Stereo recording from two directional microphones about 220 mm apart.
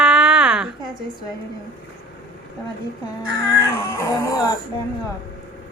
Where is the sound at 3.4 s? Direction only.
15° left (ahead or behind).